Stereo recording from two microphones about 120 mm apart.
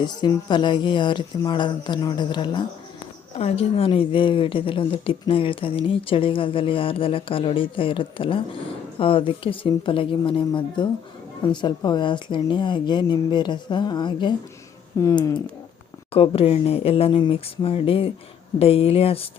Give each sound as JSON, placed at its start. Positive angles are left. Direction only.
{"t": 0.0, "sound": "speech", "side_deg": 35}
{"t": 3.3, "sound": "speech", "side_deg": 55}
{"t": 16.1, "sound": "speech", "side_deg": 50}